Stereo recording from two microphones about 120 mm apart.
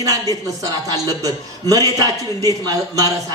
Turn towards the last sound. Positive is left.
turn(degrees=-30)  # may be behind; listen again after turning